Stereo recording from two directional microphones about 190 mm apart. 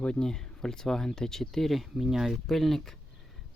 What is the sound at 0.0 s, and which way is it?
Speech, 5° left (ahead or behind).